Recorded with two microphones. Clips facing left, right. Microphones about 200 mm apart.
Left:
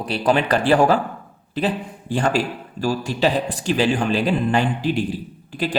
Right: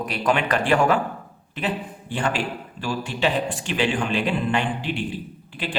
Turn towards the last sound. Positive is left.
turn(degrees=40)  # may be behind; listen again after turning